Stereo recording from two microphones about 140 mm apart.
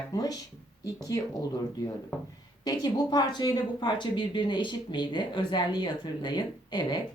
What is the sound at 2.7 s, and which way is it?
A woman's voice, 30° left (ahead or behind).